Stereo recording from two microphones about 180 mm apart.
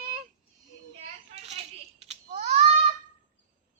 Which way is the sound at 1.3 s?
35° right (ahead or behind).